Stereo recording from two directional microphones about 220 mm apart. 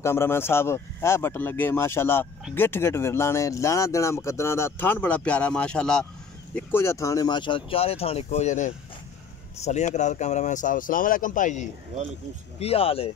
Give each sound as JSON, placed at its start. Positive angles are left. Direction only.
{"t": 0.0, "sound": "speech", "side_deg": 10}